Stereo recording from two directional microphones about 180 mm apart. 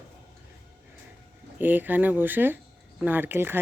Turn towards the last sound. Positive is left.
turn(degrees=-10)  # may be behind; listen again after turning